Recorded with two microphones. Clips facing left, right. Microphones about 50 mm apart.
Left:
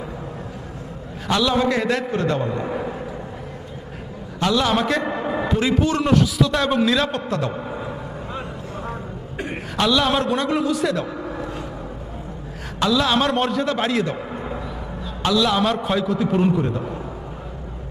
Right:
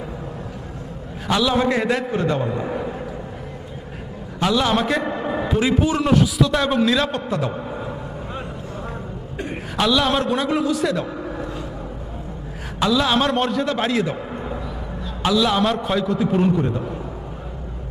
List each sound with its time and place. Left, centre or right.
1.3 s a man's voice: centre
1.6 s a man's voice: centre
1.9 s a man's voice: centre
2.7 s vehicle: left
4.4 s a man's voice: centre
7.6 s a sound: centre
9.7 s a man's voice: centre
11.2 s a sound: left
12.8 s a man's voice: centre
14.3 s a sound: centre
15.2 s a man's voice: centre